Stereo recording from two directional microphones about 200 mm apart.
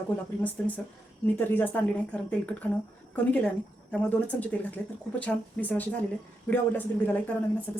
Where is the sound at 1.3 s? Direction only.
10° left (ahead or behind).